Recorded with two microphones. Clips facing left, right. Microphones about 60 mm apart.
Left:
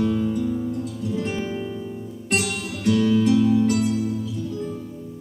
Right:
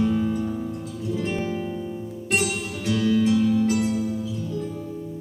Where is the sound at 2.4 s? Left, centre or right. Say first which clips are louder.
Even; left.